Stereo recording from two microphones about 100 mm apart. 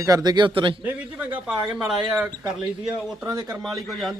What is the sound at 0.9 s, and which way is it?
Speech, 15° right (ahead or behind).